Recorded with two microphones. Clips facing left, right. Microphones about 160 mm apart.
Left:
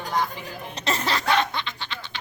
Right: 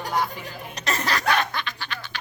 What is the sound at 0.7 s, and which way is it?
Snicker, 25° left (ahead or behind).